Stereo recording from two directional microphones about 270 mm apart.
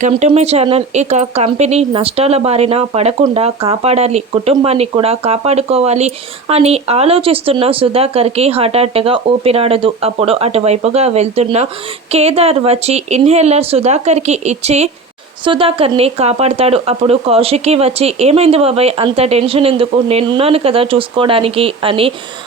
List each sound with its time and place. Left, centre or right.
0.0 s speech: right